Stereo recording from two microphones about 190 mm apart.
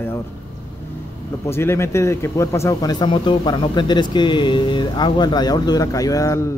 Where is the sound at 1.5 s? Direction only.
15° left (ahead or behind).